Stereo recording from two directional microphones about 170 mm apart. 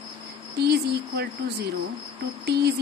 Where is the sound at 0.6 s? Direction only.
75° right (ahead or behind).